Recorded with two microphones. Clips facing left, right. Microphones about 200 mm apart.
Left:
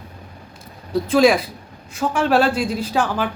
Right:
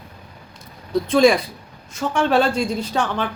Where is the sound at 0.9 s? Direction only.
5° left (ahead or behind).